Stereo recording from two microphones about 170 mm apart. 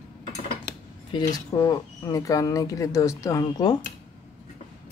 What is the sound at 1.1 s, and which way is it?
Speech, 25° left (ahead or behind).